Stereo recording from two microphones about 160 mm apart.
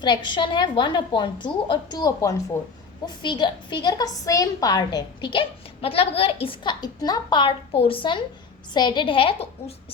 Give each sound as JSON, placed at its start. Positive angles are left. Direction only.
{"t": 0.0, "sound": "a woman's voice", "side_deg": 30}